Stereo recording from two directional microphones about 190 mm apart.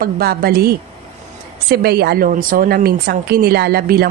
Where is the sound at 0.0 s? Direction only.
50° right (ahead or behind).